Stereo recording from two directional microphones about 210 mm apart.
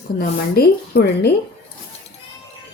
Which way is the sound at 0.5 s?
50° left (ahead or behind).